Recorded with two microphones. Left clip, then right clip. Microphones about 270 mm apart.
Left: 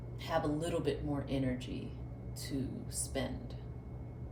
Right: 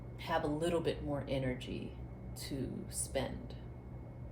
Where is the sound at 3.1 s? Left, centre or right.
Right.